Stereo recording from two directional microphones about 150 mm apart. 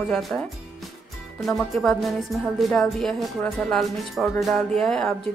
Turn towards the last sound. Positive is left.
turn(degrees=5)  # may be behind; listen again after turning